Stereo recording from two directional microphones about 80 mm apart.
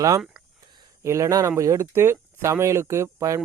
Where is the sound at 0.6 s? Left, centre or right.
Right.